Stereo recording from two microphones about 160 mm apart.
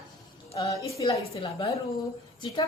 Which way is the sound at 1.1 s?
35° left (ahead or behind).